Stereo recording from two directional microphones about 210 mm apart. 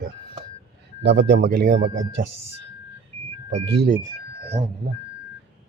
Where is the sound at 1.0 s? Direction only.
55° right (ahead or behind).